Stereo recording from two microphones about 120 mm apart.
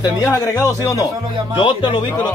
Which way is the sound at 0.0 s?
25° left (ahead or behind).